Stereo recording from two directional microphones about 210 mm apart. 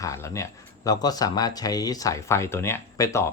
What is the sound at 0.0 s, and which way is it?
Speech, 15° left (ahead or behind).